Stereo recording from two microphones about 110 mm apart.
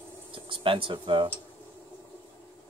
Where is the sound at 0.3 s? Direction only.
50° right (ahead or behind).